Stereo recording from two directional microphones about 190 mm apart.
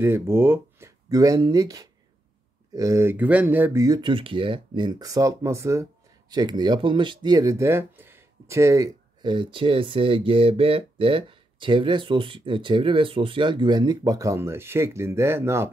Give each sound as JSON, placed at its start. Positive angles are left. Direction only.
{"t": 0.0, "sound": "speech", "side_deg": -10}